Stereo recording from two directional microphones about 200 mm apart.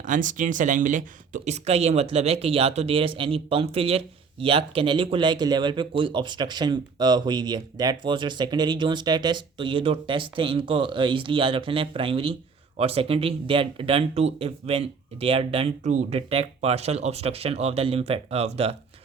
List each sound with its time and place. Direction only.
0.0 s speech: 40° right (ahead or behind)